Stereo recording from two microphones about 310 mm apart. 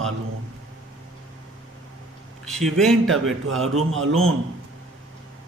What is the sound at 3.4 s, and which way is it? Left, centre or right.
Speech, right.